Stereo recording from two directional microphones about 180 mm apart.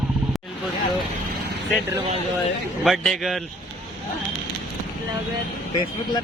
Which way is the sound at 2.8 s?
Centre (ahead or behind).